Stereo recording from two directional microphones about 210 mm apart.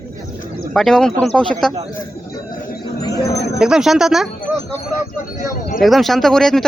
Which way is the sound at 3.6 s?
5° right (ahead or behind).